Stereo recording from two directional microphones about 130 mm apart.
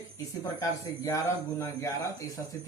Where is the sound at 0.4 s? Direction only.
25° left (ahead or behind).